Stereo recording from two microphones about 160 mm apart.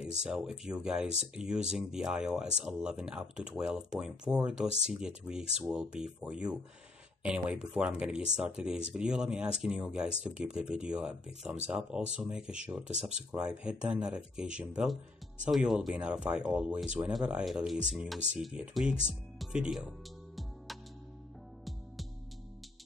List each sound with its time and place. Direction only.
0.0 s speech: 5° right (ahead or behind)